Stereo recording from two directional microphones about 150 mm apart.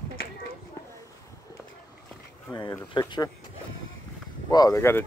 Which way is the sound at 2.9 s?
30° left (ahead or behind).